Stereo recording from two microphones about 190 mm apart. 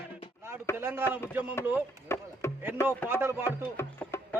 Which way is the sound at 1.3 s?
10° right (ahead or behind).